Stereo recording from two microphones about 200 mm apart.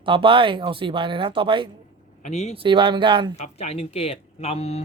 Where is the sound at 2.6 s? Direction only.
25° right (ahead or behind).